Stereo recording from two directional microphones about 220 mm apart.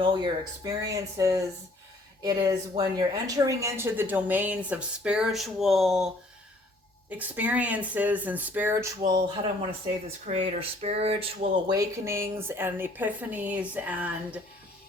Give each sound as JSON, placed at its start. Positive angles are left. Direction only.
{"t": 0.0, "sound": "speech", "side_deg": -20}
{"t": 7.2, "sound": "speech", "side_deg": -5}
{"t": 9.0, "sound": "speech", "side_deg": -20}